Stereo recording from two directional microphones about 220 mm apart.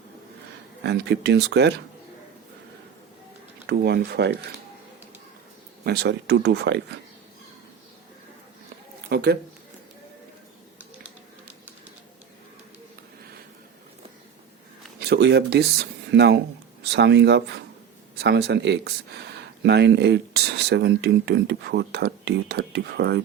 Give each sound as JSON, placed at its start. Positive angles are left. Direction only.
{"t": 0.9, "sound": "speech", "side_deg": -50}
{"t": 3.7, "sound": "speech", "side_deg": -45}
{"t": 5.8, "sound": "speech", "side_deg": -50}
{"t": 9.0, "sound": "speech", "side_deg": -45}
{"t": 15.0, "sound": "speech", "side_deg": -50}